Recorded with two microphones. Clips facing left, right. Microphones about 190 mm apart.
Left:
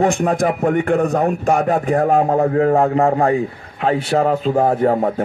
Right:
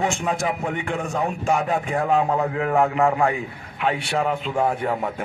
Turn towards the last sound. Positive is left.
turn(degrees=40)  # may be behind; listen again after turning